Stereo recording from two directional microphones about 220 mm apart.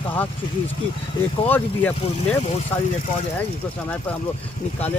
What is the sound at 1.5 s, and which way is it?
Speech, 10° left (ahead or behind).